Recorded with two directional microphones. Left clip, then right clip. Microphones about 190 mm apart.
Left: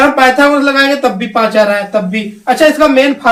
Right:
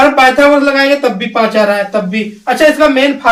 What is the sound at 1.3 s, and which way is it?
Speech, 15° right (ahead or behind).